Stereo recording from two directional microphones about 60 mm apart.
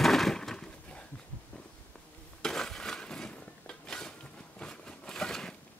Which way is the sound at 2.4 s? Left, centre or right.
Centre.